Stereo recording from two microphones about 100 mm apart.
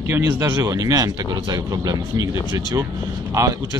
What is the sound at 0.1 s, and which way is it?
A man's voice, 25° right (ahead or behind).